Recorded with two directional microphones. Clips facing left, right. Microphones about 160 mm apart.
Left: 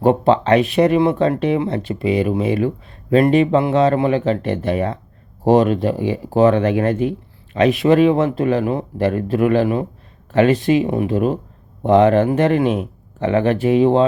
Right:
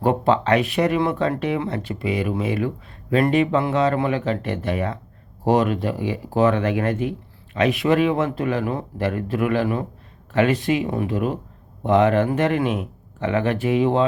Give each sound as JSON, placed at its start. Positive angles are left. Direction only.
{"t": 0.0, "sound": "speech", "side_deg": 25}